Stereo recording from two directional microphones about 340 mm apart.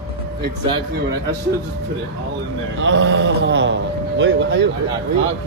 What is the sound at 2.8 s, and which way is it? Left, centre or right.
Speech, right.